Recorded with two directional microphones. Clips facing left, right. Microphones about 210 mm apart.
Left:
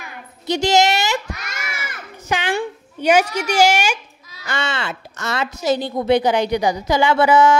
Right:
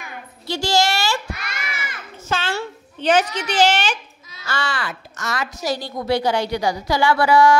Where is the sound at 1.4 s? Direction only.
45° left (ahead or behind).